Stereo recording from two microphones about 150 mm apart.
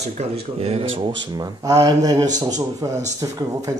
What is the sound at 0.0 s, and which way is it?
Speech, 45° right (ahead or behind).